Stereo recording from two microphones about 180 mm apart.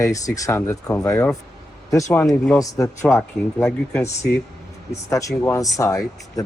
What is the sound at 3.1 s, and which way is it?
Speech, 5° left (ahead or behind).